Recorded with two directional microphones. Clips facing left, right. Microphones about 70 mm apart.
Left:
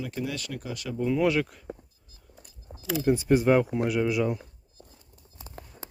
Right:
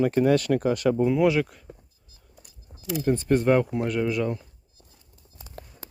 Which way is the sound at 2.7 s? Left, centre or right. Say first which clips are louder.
Left 6 dB; left.